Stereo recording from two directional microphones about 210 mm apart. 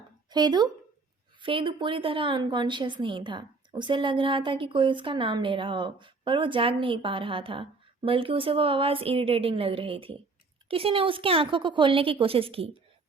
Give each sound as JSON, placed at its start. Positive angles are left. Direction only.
{"t": 0.3, "sound": "a woman's voice", "side_deg": -20}